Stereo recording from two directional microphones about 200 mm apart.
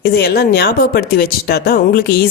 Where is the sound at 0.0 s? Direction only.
50° left (ahead or behind).